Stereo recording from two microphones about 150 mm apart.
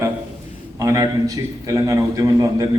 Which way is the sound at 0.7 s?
20° right (ahead or behind).